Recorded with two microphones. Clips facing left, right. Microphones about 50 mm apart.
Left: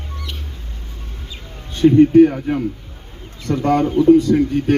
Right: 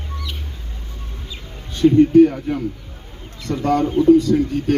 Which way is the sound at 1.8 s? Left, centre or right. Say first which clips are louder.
Left 1 dB; left.